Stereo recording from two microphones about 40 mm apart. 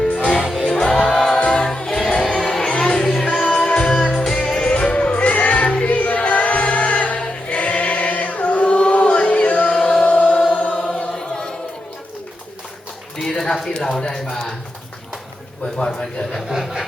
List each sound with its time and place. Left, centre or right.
0.2 s music: left
0.4 s music: centre
0.7 s music: centre
1.5 s music: left
3.4 s music: left
4.4 s music: left
7.2 s choir: left
9.8 s chant: left
10.5 s choir: left
13.2 s a sound: centre
13.7 s a sound: left
15.6 s a sound: centre
16.5 s a sound: centre